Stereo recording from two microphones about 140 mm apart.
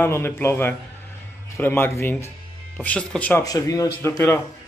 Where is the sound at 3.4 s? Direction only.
25° left (ahead or behind).